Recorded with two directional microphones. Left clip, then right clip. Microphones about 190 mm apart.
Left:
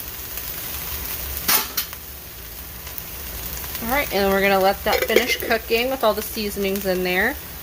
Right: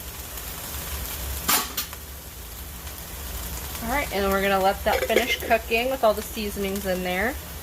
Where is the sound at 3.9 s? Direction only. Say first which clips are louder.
Left 4 dB; 65° left (ahead or behind).